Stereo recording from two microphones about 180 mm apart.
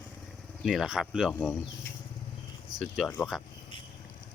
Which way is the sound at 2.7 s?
Centre (ahead or behind).